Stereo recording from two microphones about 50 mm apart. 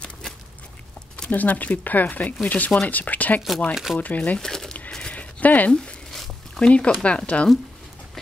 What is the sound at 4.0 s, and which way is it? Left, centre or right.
Speech, left.